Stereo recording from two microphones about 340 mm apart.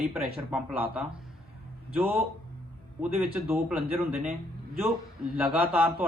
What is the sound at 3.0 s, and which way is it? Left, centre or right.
A man's voice, centre.